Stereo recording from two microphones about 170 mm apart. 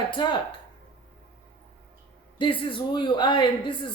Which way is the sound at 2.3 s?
30° left (ahead or behind).